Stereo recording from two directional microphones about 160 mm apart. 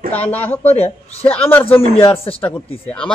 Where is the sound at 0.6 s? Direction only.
40° left (ahead or behind).